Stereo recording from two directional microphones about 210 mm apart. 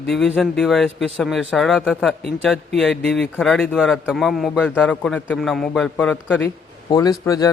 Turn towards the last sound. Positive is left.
turn(degrees=15)  # may be behind; listen again after turning